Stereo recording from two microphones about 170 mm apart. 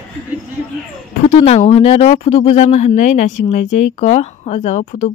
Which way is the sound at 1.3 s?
40° left (ahead or behind).